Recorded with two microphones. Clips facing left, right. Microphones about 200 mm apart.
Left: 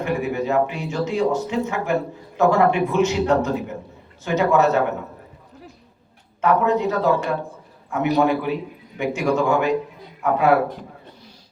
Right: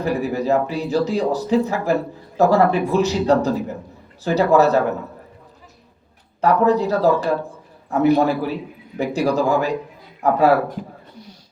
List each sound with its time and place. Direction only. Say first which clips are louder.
0.0 s speech: right 2 dB; 35° right (ahead or behind)
6.4 s speech: right 2 dB; 35° right (ahead or behind)